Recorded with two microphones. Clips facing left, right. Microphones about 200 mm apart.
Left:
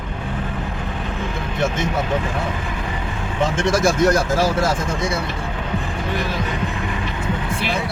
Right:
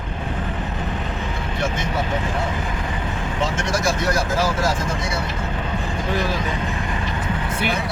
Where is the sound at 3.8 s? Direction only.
50° left (ahead or behind).